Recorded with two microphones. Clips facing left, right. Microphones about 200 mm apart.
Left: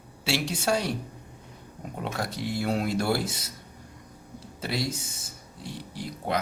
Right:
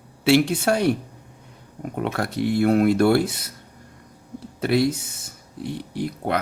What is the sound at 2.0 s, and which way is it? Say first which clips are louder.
Speech: right 8 dB; 60° right (ahead or behind).